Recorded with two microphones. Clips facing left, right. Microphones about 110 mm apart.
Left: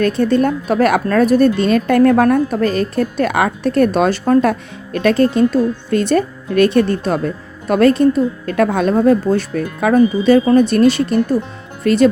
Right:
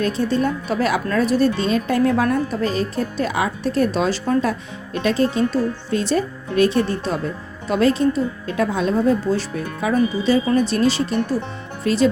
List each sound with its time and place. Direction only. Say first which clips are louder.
0.0 s a woman's voice: left 6 dB; 55° left (ahead or behind)